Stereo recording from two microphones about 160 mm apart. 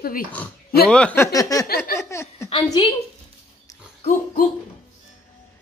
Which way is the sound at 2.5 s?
30° left (ahead or behind).